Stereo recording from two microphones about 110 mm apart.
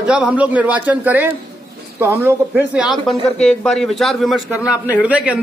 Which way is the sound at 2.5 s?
10° right (ahead or behind).